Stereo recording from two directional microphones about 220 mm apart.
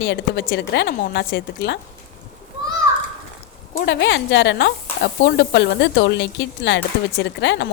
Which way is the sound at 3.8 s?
50° left (ahead or behind).